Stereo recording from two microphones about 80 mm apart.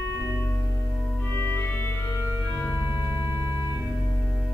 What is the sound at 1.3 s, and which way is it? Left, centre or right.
Music, left.